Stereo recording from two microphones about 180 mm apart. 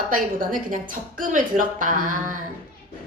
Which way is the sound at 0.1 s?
50° right (ahead or behind).